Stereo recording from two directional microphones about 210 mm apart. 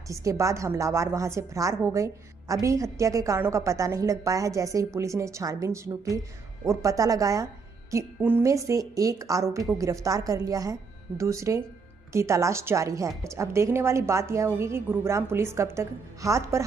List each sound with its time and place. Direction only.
0.1 s a woman's voice: 15° right (ahead or behind)